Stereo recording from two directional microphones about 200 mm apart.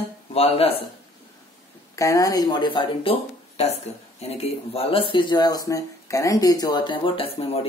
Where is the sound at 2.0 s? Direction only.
15° left (ahead or behind).